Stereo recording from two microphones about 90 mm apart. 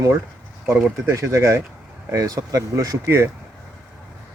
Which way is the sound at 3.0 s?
30° right (ahead or behind).